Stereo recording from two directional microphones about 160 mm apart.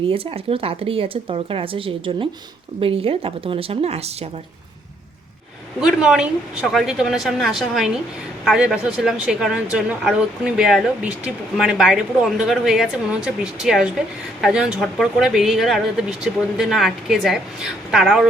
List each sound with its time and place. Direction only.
0.1 s speech: 35° right (ahead or behind)
5.8 s speech: 5° right (ahead or behind)